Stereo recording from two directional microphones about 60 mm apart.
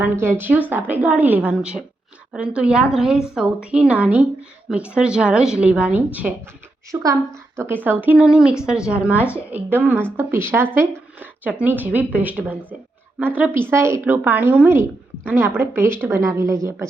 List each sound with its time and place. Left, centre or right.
0.0 s a woman's voice: right
6.9 s a woman's voice: right
7.7 s a woman's voice: right
8.2 s a woman's voice: centre
9.5 s a woman's voice: right
11.2 s a woman's voice: right
13.5 s a woman's voice: right
14.0 s speech: right
15.4 s a woman's voice: right